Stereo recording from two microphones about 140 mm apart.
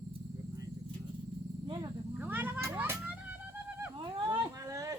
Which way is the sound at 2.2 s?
15° right (ahead or behind).